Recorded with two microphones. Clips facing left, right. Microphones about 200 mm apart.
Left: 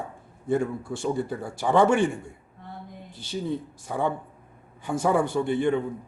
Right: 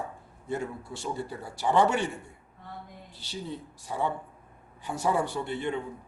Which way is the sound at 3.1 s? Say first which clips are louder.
Left 8 dB; 50° left (ahead or behind).